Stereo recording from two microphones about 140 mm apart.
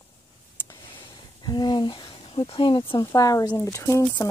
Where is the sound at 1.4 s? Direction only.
30° left (ahead or behind).